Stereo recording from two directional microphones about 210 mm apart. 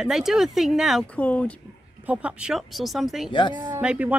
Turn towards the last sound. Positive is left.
turn(degrees=-5)  # may be behind; listen again after turning